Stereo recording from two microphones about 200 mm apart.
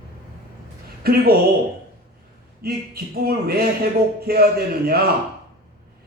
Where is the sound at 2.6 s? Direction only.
50° right (ahead or behind).